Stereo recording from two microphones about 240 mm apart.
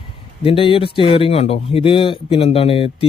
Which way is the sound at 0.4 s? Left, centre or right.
Left.